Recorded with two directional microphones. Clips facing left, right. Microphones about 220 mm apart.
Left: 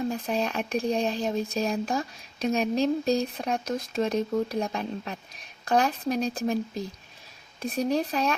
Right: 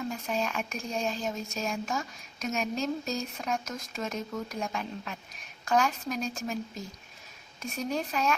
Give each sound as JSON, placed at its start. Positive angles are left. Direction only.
{"t": 0.1, "sound": "speech", "side_deg": 35}